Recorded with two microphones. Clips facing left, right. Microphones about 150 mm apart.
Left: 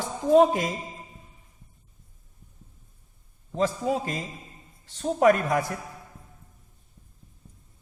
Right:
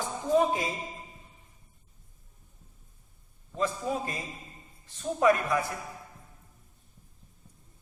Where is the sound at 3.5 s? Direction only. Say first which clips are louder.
Left 5 dB; 85° left.